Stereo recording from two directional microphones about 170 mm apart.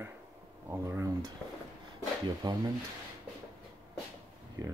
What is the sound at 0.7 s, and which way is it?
Speech, 15° right (ahead or behind).